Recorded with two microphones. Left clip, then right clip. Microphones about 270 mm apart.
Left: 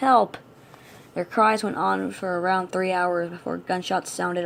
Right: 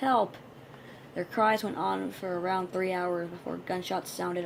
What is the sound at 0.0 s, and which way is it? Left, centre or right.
Speech, left.